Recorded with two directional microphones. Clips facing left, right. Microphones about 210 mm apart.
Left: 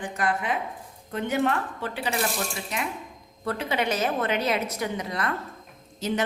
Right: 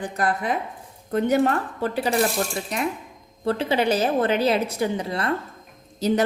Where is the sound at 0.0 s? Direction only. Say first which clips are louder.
Right 3 dB; 35° right (ahead or behind).